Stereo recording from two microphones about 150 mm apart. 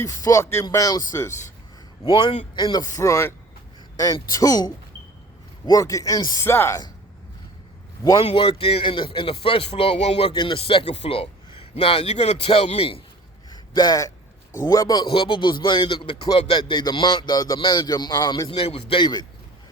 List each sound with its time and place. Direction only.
0.0 s speech: 20° left (ahead or behind)
2.0 s a man's voice: 35° left (ahead or behind)
8.2 s a man's voice: 40° left (ahead or behind)
13.5 s a sound: 25° left (ahead or behind)
14.6 s a man's voice: 20° left (ahead or behind)